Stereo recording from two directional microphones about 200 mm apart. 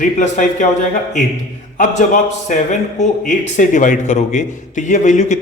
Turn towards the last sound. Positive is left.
turn(degrees=35)  # may be behind; listen again after turning